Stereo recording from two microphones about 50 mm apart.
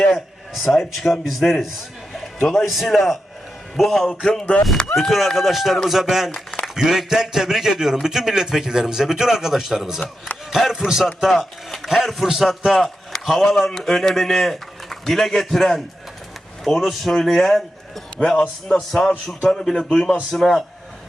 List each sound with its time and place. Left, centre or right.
0.1 s a man's voice: centre
4.1 s music: centre
4.9 s a man's voice: centre
11.3 s a man's voice: centre